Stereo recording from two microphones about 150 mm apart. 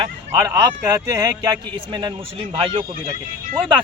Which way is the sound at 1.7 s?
30° right (ahead or behind).